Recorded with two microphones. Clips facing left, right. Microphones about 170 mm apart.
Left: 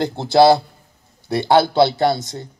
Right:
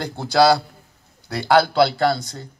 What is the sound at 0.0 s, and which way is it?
Speech, 20° left (ahead or behind).